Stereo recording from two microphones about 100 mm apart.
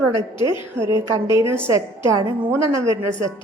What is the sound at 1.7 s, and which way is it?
Speech, 30° right (ahead or behind).